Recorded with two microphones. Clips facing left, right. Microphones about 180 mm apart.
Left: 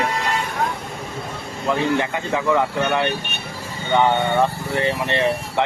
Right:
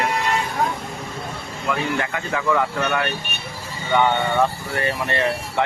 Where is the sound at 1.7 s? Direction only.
20° left (ahead or behind).